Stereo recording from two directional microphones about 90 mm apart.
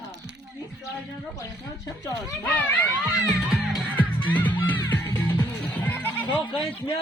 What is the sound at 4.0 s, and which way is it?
Music, 20° left (ahead or behind).